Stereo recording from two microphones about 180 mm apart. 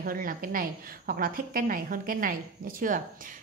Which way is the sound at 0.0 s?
50° right (ahead or behind).